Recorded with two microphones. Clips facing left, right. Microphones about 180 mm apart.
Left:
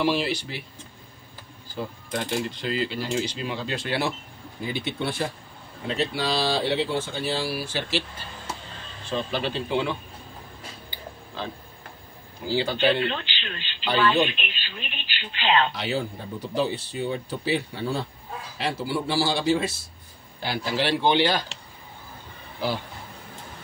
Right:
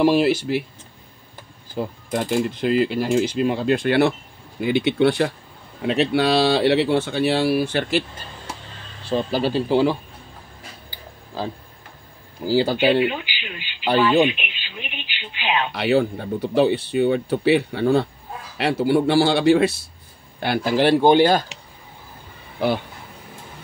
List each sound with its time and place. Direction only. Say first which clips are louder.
0.0 s speech: right 8 dB; 45° right (ahead or behind)
1.8 s speech: right 6 dB; 50° right (ahead or behind)
4.6 s speech: right 11 dB; 70° right (ahead or behind); by 8.0 s 55° right (ahead or behind)
9.1 s speech: right 7 dB; 40° right (ahead or behind)
12.7 s speech: right 5 dB; 10° right (ahead or behind)
15.7 s speech: right 9 dB; 65° right (ahead or behind)
20.4 s speech: right 8 dB; 55° right (ahead or behind)